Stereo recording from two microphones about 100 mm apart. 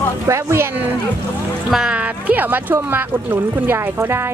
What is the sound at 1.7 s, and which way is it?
Speech, 10° right (ahead or behind).